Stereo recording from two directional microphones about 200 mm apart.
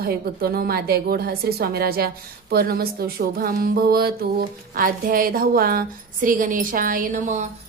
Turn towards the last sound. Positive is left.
turn(degrees=-40)  # may be behind; listen again after turning